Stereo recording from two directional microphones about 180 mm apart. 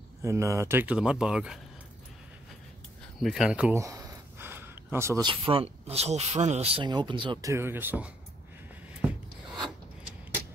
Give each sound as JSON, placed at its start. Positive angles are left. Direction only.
{"t": 0.2, "sound": "speech", "side_deg": -15}
{"t": 3.2, "sound": "speech", "side_deg": 0}
{"t": 3.7, "sound": "a sound", "side_deg": -20}
{"t": 5.2, "sound": "speech", "side_deg": -25}
{"t": 7.5, "sound": "speech", "side_deg": -10}
{"t": 9.0, "sound": "rub", "side_deg": -10}